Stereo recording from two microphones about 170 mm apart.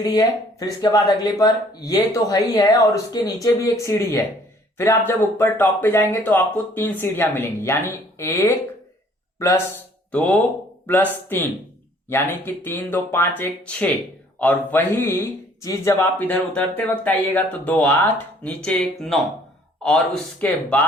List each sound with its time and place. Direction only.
0.0 s a man's voice: 25° left (ahead or behind); by 19.2 s centre (ahead or behind)
20.4 s a man's voice: 10° left (ahead or behind)